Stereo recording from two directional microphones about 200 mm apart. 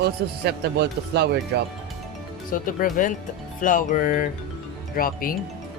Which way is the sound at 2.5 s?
45° left (ahead or behind).